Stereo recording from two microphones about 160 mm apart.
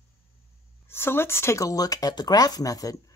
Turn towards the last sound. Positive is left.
turn(degrees=20)  # may be behind; listen again after turning